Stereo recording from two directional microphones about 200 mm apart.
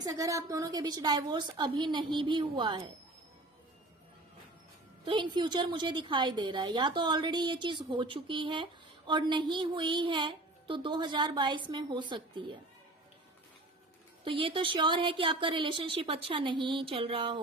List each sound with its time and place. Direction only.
0.0 s a woman's voice: 15° right (ahead or behind)
5.0 s a woman's voice: 25° right (ahead or behind)
14.3 s a woman's voice: 25° right (ahead or behind)